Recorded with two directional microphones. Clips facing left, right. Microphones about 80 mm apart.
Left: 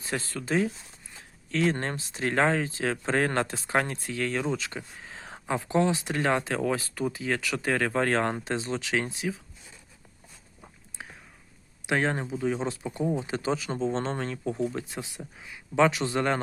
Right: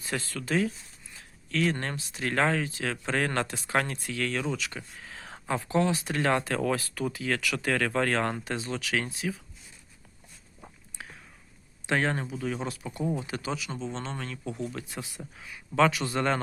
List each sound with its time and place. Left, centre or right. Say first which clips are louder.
0.0 s speech: left 1 dB; left
11.0 s a sound: left 1 dB; left
11.9 s speech: left 1 dB; centre